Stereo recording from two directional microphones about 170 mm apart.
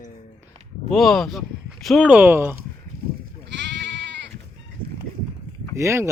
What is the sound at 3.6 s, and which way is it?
Sheep, 90° right.